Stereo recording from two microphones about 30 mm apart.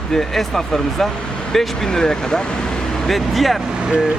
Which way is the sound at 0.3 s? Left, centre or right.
Centre.